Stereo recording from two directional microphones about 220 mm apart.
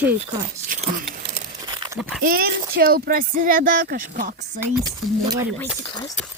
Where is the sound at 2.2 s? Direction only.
40° right (ahead or behind).